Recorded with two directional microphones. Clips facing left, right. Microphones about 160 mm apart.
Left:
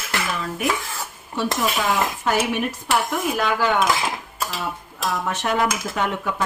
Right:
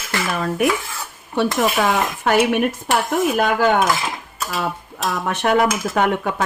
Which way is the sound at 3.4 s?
50° right (ahead or behind).